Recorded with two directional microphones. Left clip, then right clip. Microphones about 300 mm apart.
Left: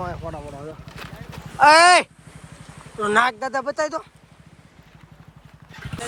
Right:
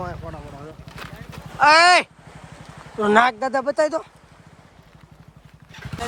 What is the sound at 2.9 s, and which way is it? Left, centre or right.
Speech, centre.